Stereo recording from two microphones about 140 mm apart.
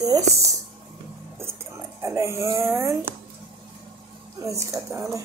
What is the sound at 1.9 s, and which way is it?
Speech, 25° right (ahead or behind).